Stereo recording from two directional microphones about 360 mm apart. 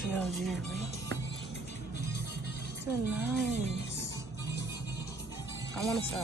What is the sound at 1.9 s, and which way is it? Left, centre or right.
Music, left.